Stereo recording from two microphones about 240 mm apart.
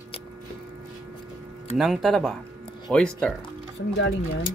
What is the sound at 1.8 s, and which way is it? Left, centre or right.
Speech, centre.